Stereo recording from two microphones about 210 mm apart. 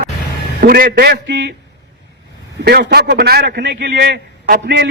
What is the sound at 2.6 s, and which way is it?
Speech, 50° right (ahead or behind).